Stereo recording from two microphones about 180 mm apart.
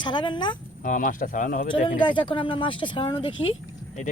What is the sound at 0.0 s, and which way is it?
Speech, 25° left (ahead or behind).